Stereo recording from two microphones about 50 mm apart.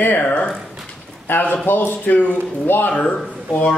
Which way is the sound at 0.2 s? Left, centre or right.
Left.